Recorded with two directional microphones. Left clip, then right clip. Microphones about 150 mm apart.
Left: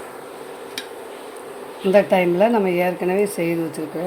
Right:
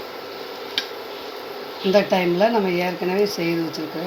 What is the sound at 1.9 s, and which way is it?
Speech, 25° left (ahead or behind).